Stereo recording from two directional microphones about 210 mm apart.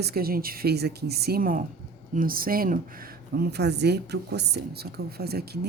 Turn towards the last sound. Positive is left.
turn(degrees=-50)  # may be behind; listen again after turning